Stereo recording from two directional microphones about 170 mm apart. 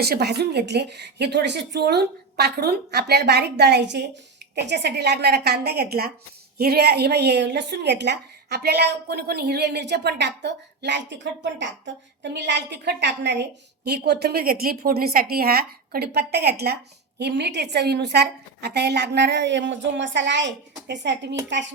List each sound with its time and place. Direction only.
0.0 s a woman's voice: 70° right (ahead or behind); by 21.3 s 90° right